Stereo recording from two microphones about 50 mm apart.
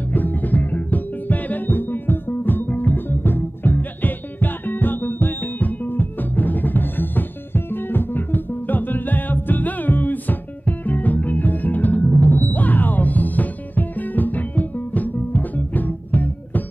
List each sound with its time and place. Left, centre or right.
0.1 s music: left